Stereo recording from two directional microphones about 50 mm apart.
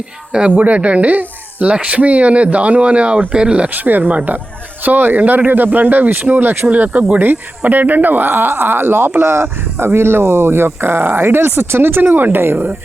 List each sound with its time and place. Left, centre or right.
0.5 s speech: right
1.7 s speech: centre
3.8 s speech: right
6.7 s speech: right